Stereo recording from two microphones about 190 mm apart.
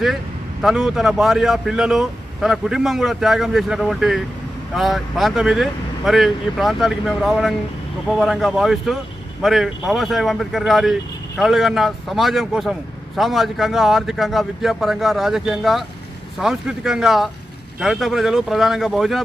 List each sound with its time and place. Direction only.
0.6 s speech: centre (ahead or behind)